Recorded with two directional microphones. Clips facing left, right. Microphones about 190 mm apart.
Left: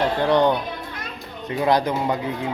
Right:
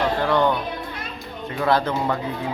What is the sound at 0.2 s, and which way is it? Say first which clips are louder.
Speech: left 3 dB; 20° left (ahead or behind).